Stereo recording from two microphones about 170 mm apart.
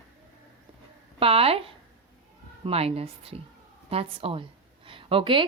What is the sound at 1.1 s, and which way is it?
A woman's voice, 35° right (ahead or behind).